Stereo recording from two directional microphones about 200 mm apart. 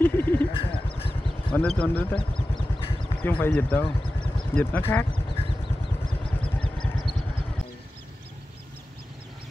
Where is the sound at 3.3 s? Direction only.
10° left (ahead or behind).